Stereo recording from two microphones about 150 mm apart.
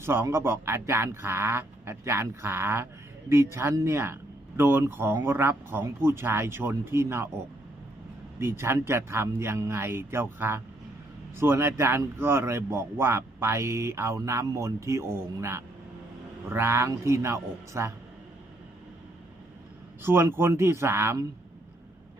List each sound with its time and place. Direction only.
0.0 s speech: 15° right (ahead or behind)
8.4 s speech: 15° right (ahead or behind)
20.0 s speech: 15° right (ahead or behind)